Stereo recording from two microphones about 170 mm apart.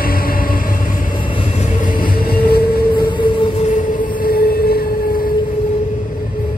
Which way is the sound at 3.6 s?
50° left (ahead or behind).